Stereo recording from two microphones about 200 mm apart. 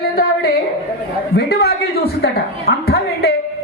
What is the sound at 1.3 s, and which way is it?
A woman's voice, 50° left (ahead or behind).